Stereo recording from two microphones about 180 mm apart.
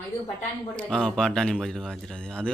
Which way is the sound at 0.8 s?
5° left (ahead or behind).